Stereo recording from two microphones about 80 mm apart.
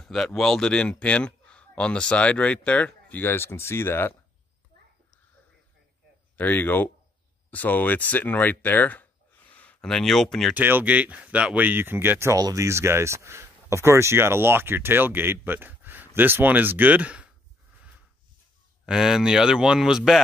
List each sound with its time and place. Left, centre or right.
0.0 s speech: centre; by 4.1 s left
6.3 s speech: left
9.5 s a sound: centre
9.8 s speech: centre
10.5 s speech: right
12.4 s speech: right
12.6 s speech: right; by 17.3 s centre
17.7 s a sound: centre
18.9 s speech: centre